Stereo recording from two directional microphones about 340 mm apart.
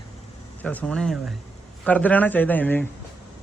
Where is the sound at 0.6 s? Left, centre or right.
Centre.